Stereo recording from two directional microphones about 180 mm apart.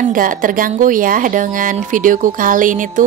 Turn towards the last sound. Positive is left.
turn(degrees=-45)  # may be behind; listen again after turning